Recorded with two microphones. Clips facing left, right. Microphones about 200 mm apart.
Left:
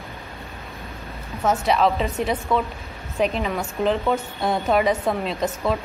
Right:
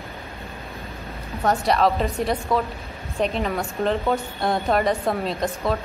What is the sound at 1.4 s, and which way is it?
A woman's voice, centre (ahead or behind).